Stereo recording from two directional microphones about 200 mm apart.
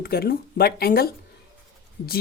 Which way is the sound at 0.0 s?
50° left (ahead or behind).